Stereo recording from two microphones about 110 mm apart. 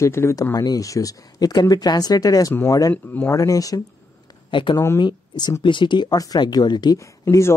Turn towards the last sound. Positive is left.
turn(degrees=25)  # may be behind; listen again after turning